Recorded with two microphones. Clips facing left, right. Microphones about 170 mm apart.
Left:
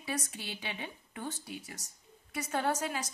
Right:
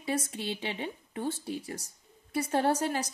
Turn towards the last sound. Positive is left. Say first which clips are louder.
# right 5 dB
turn(degrees=-35)  # may be behind; listen again after turning